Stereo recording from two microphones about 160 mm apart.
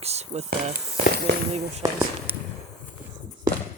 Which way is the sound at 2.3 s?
10° right (ahead or behind).